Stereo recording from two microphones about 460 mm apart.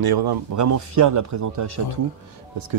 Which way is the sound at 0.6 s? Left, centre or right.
Right.